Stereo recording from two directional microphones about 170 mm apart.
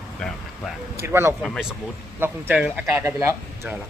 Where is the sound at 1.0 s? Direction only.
15° right (ahead or behind).